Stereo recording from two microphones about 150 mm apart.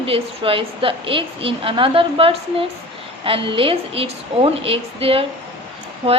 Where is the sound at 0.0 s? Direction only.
40° right (ahead or behind).